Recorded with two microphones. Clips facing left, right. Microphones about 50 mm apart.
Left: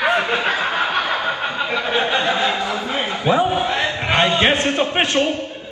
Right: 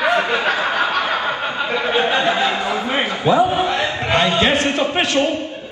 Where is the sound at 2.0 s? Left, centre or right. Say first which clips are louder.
Right 2 dB; right.